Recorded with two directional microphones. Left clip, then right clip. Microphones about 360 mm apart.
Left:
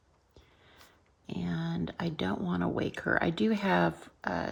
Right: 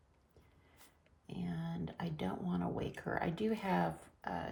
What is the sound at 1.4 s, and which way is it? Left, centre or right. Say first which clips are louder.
Speech: left 8 dB; centre.